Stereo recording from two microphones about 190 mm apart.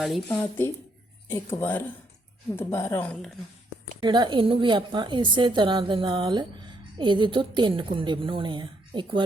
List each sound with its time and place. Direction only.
0.0 s speech: 5° left (ahead or behind)
4.0 s a woman's voice: 25° right (ahead or behind)